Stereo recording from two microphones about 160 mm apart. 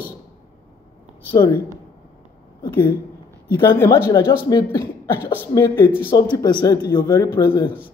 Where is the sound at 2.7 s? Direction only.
15° left (ahead or behind).